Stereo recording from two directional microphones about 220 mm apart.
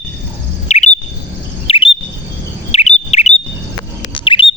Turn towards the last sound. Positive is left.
turn(degrees=20)  # may be behind; listen again after turning